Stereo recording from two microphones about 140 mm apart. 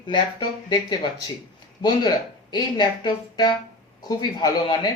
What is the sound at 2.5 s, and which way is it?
Speech, 30° left (ahead or behind).